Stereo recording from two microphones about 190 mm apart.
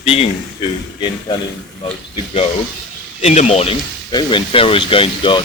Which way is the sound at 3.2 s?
35° left (ahead or behind).